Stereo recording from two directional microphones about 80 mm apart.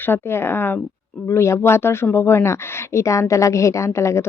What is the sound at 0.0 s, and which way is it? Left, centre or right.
A woman's voice, left.